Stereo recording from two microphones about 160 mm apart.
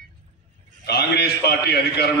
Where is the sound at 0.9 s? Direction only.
90° left.